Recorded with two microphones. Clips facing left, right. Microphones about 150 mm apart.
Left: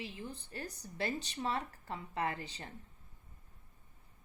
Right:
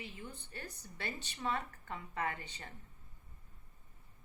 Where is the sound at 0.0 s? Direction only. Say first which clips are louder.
Left 4 dB; 30° left (ahead or behind).